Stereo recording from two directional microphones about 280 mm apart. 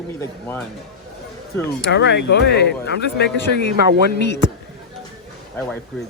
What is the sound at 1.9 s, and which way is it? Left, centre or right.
Speech, left.